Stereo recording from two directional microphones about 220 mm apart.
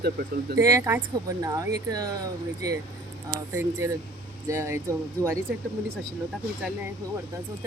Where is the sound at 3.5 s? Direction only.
15° right (ahead or behind).